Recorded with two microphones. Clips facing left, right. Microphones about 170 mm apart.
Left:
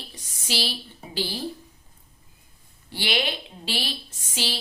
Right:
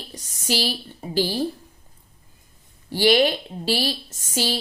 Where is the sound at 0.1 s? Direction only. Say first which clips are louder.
Right 7 dB; 40° right (ahead or behind).